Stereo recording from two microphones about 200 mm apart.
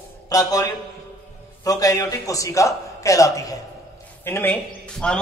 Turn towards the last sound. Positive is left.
turn(degrees=5)  # may be behind; listen again after turning